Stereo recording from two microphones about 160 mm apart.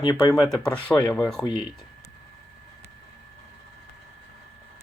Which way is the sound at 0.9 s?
10° left (ahead or behind).